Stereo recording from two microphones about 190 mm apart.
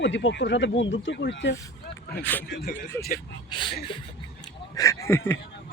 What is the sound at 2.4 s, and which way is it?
Speech, 55° left (ahead or behind).